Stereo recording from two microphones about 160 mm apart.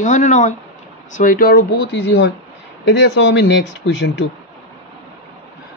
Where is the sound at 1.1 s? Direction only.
60° left (ahead or behind); by 3.9 s 90° left.